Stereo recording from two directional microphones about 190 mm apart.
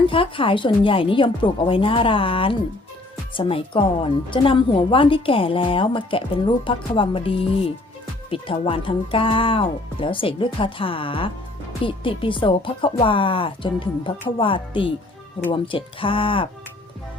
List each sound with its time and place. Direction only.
0.1 s speech: 25° left (ahead or behind)